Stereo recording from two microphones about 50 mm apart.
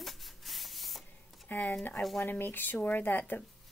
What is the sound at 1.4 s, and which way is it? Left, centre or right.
Speech, left.